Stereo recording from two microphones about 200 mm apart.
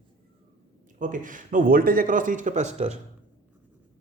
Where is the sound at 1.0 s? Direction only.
40° right (ahead or behind).